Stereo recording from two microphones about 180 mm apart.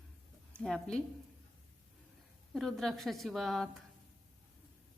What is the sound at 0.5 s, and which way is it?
Speech, centre (ahead or behind).